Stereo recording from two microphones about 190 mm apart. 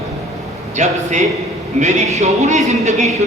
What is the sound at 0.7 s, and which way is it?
Speech, 40° right (ahead or behind).